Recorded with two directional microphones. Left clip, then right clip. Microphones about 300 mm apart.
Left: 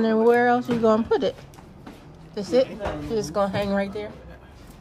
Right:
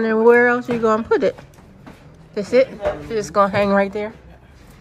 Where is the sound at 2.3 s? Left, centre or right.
Centre.